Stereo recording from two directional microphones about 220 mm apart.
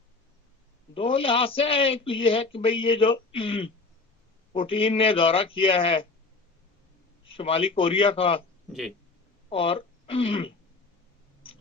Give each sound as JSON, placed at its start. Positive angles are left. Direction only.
{"t": 0.9, "sound": "speech", "side_deg": 25}
{"t": 7.3, "sound": "speech", "side_deg": 25}
{"t": 9.5, "sound": "speech", "side_deg": 25}